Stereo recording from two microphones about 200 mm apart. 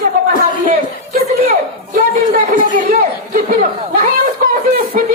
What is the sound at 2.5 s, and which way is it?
Speech, 40° right (ahead or behind).